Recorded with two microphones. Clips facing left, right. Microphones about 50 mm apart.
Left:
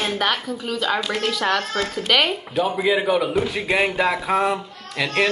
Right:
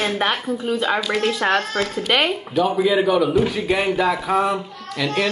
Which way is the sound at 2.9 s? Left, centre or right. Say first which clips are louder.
Right 3 dB; centre.